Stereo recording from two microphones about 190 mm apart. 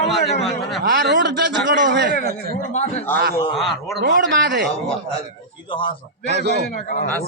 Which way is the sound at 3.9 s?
65° right (ahead or behind).